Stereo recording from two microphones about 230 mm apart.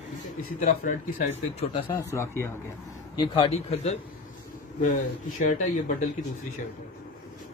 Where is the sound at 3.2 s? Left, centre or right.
Left.